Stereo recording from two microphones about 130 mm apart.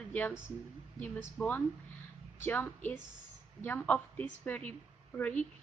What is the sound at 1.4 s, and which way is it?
A woman's voice, 5° left (ahead or behind).